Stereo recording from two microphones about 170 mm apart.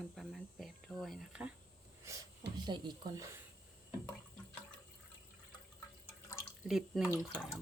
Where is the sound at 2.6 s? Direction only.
25° right (ahead or behind).